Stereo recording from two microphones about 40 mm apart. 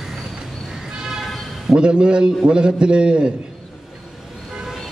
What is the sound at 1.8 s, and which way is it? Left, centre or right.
A man's voice, right.